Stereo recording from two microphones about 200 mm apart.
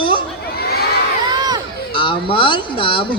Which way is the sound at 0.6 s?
50° left (ahead or behind).